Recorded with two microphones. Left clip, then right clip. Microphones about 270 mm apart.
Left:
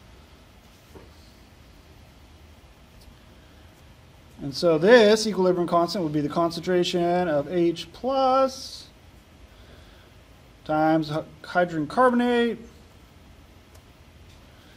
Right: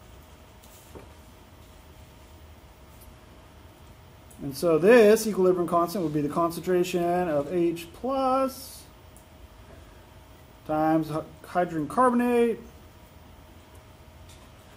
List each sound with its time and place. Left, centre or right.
4.5 s speech: left
10.7 s speech: left